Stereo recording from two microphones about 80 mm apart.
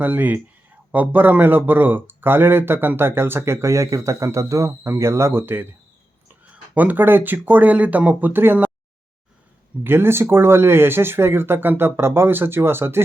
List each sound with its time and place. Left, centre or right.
0.0 s speech: right
6.7 s speech: right
9.8 s speech: right